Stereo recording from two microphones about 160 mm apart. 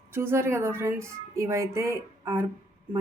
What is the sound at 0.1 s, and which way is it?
A woman's voice, 15° right (ahead or behind).